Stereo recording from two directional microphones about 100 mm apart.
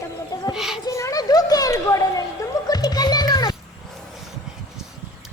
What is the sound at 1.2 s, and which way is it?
Music, 40° left (ahead or behind).